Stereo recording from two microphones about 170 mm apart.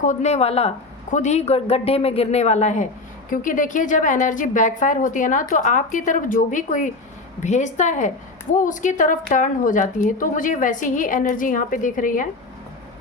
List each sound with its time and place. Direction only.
0.0 s a woman's voice: 45° left (ahead or behind)